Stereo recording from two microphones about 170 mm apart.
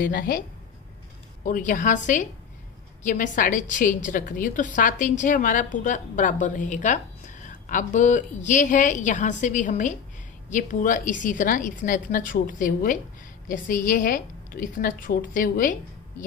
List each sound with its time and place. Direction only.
0.0 s a woman's voice: 60° left (ahead or behind)
1.4 s a woman's voice: 50° left (ahead or behind)